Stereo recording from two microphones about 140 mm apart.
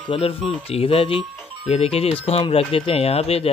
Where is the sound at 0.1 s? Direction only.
45° left (ahead or behind).